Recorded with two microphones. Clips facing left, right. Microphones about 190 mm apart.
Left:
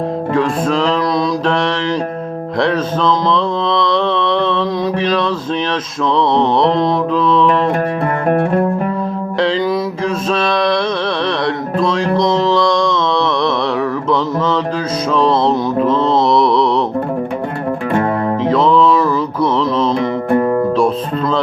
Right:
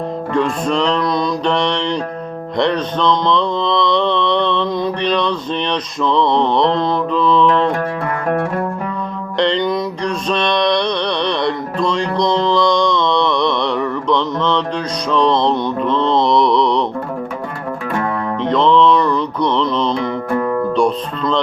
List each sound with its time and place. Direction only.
0.3 s mantra: centre (ahead or behind)
9.4 s mantra: 5° left (ahead or behind)
18.4 s music: 5° left (ahead or behind)
20.0 s music: 35° left (ahead or behind)
20.7 s speech: 5° left (ahead or behind)